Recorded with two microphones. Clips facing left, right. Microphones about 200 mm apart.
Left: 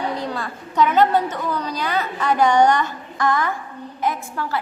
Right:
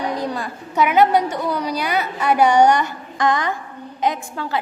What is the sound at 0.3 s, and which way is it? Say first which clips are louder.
A woman's voice: even; 10° right (ahead or behind).